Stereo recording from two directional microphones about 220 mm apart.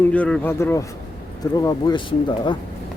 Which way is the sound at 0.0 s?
5° left (ahead or behind).